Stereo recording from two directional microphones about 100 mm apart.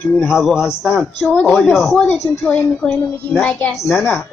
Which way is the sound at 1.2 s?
15° left (ahead or behind).